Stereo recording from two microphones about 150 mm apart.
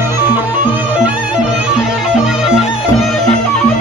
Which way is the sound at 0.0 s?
15° right (ahead or behind).